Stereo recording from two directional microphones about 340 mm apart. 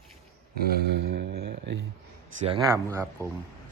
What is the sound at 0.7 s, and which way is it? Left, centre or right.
Speech, right.